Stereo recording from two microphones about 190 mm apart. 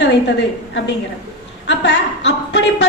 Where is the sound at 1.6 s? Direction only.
65° left (ahead or behind).